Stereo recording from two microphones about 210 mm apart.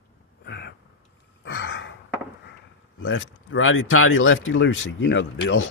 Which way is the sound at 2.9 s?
65° left (ahead or behind).